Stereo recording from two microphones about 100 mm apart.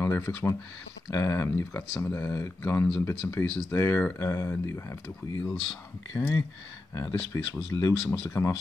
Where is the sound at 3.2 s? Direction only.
10° left (ahead or behind).